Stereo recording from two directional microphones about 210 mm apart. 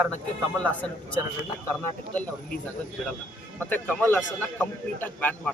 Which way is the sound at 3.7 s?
10° left (ahead or behind).